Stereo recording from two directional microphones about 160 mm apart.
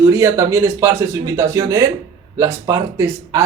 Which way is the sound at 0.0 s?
15° right (ahead or behind).